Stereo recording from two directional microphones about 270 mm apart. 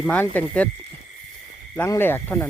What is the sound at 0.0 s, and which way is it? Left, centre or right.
Speech, centre.